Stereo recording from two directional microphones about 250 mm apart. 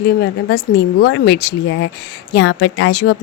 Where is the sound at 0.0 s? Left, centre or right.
Left.